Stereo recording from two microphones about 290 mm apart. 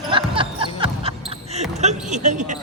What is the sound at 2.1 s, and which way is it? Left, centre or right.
Speech, right.